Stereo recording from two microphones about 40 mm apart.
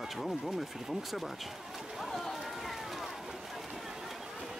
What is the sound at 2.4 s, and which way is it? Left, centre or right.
Run, centre.